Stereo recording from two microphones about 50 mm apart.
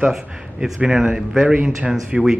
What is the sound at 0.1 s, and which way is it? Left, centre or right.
Speech, centre.